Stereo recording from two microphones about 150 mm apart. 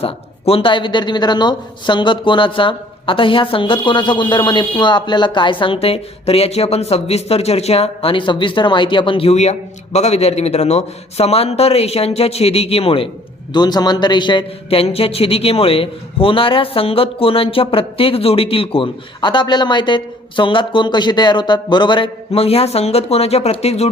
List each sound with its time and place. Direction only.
0.0 s speech: 40° left (ahead or behind)
13.5 s speech: 30° left (ahead or behind); by 23.9 s 45° left (ahead or behind)